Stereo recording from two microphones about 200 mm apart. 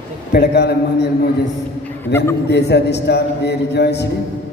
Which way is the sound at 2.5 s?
55° left (ahead or behind).